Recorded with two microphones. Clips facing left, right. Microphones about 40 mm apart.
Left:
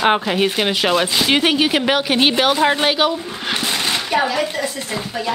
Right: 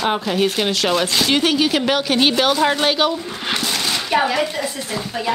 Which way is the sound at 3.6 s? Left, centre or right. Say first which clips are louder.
Left 2 dB; left.